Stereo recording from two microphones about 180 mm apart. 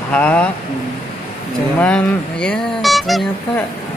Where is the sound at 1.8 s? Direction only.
5° left (ahead or behind).